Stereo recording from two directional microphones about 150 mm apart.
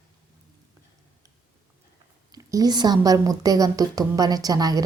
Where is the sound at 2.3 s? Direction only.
25° right (ahead or behind).